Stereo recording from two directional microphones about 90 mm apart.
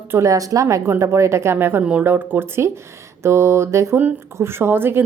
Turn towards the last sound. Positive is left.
turn(degrees=-25)  # may be behind; listen again after turning